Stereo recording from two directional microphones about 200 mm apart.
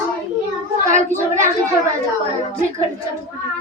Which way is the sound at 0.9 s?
40° right (ahead or behind).